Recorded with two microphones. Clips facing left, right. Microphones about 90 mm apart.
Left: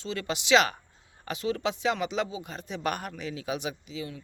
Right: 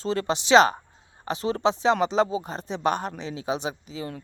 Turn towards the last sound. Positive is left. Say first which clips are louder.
# right 3 dB
turn(degrees=-35)  # may be behind; listen again after turning